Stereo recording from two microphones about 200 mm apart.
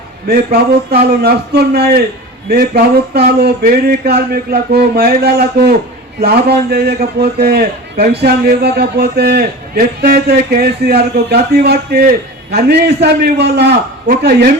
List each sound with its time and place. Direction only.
0.3 s a man's voice: 50° right (ahead or behind)